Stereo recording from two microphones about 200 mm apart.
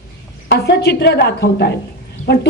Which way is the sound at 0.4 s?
55° left (ahead or behind).